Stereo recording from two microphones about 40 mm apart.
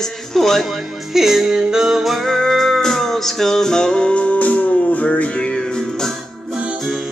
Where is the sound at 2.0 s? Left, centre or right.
Centre.